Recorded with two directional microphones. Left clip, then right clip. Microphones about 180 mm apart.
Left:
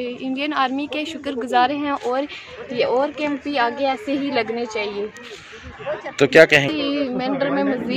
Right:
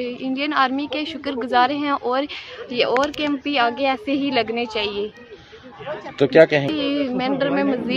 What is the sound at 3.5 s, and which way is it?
A woman's voice, 25° right (ahead or behind).